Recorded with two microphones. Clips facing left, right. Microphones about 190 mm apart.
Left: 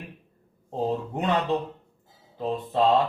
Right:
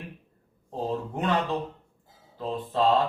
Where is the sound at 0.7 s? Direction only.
20° left (ahead or behind).